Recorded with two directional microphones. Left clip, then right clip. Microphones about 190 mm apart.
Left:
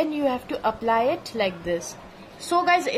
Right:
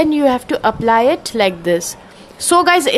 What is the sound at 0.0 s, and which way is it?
A woman's voice, 45° right (ahead or behind).